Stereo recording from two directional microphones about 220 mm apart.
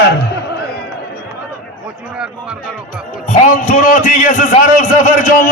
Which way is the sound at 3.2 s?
35° left (ahead or behind).